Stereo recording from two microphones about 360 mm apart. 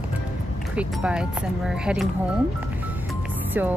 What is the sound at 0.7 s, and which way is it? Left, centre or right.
Speech, centre.